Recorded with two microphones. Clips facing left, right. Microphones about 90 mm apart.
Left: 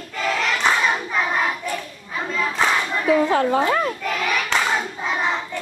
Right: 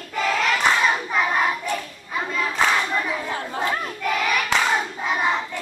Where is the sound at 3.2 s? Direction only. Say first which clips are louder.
Left 10 dB; 90° left.